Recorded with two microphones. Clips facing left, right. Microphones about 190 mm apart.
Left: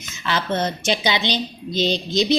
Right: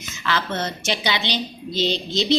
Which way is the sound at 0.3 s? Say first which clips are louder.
Left 3 dB; 20° left (ahead or behind).